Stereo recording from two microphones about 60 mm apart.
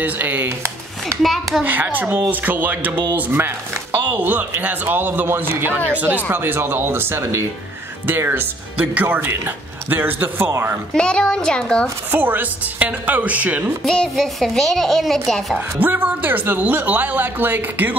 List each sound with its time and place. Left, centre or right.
0.0 s speech: right
1.2 s a woman's voice: centre
1.6 s speech: right
10.9 s a child's voice: centre
12.1 s speech: right
14.1 s a woman's voice: centre
15.5 s speech: right